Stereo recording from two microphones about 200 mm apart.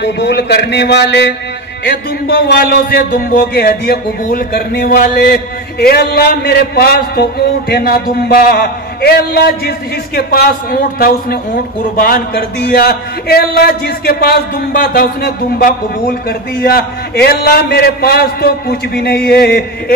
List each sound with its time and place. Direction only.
0.0 s a man's voice: 60° left (ahead or behind)